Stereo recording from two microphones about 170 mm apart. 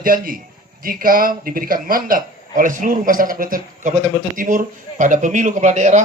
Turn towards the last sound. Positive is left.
turn(degrees=-45)  # may be behind; listen again after turning